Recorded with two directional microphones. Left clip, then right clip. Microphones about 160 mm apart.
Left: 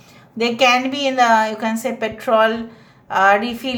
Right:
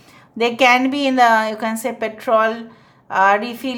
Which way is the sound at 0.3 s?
30° right (ahead or behind).